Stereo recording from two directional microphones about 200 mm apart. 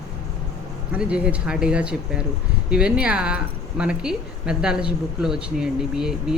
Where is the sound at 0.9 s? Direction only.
5° right (ahead or behind).